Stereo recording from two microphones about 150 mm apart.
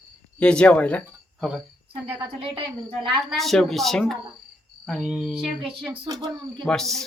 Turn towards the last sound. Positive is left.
turn(degrees=0)  # may be behind; listen again after turning